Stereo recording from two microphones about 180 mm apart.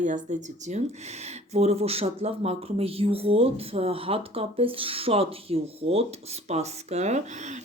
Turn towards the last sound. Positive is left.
turn(degrees=-40)  # may be behind; listen again after turning